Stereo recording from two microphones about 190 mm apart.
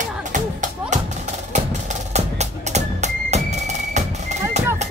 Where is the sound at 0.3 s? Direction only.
40° right (ahead or behind).